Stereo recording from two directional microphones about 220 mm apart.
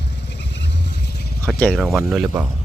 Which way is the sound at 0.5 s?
50° left (ahead or behind).